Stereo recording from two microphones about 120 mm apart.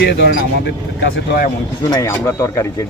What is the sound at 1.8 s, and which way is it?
Speech, 30° left (ahead or behind).